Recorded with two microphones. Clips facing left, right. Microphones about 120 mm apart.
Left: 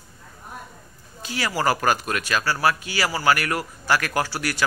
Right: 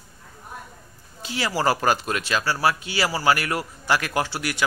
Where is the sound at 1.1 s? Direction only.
25° right (ahead or behind).